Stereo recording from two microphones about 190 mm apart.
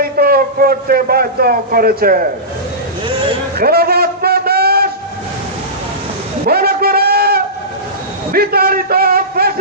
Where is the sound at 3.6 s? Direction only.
55° right (ahead or behind).